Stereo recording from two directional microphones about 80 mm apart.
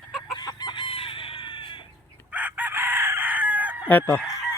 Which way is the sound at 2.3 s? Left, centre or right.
Right.